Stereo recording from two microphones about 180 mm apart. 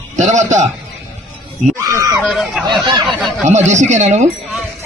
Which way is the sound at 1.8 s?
20° right (ahead or behind).